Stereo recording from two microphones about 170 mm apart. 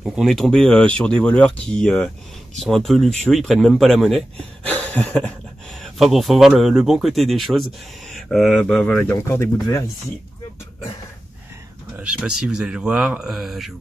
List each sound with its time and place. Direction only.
0.0 s speech: centre (ahead or behind)
4.6 s a sound: 10° left (ahead or behind)
5.8 s speech: centre (ahead or behind)
9.1 s speech: 15° left (ahead or behind)
12.0 s speech: 5° right (ahead or behind)